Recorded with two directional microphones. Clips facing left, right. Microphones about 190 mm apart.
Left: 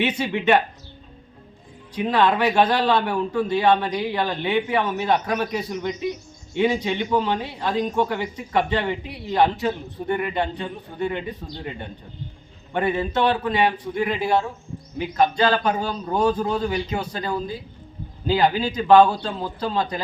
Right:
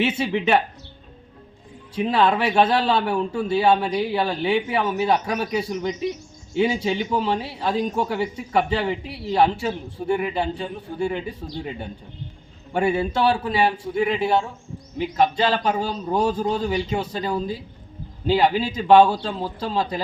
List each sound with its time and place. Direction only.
0.0 s a man's voice: 5° right (ahead or behind)
2.0 s a man's voice: 5° right (ahead or behind)
12.7 s a man's voice: 10° right (ahead or behind)